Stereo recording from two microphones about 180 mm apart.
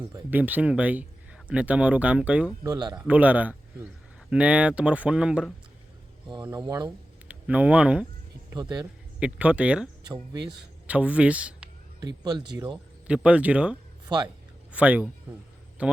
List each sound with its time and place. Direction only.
0.3 s speech: 10° right (ahead or behind)
2.6 s speech: 20° right (ahead or behind)
3.1 s speech: 10° right (ahead or behind)
6.2 s speech: 25° right (ahead or behind)
7.3 s speech: 10° right (ahead or behind)
8.5 s speech: 20° right (ahead or behind)
9.2 s speech: 5° right (ahead or behind)
11.9 s speech: 20° right (ahead or behind)
13.1 s a man's voice: 5° right (ahead or behind)